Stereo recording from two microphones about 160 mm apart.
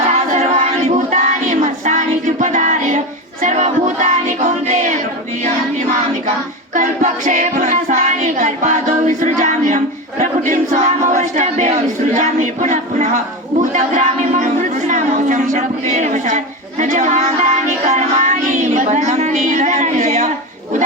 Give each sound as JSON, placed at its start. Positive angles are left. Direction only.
{"t": 0.3, "sound": "battle cry", "side_deg": -50}
{"t": 3.4, "sound": "music", "side_deg": -50}
{"t": 6.7, "sound": "choir", "side_deg": -50}
{"t": 13.6, "sound": "a sound", "side_deg": -50}
{"t": 17.8, "sound": "music", "side_deg": -45}